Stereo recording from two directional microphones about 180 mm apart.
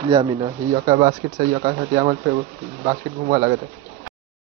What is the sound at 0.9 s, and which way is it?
Speech, 50° right (ahead or behind).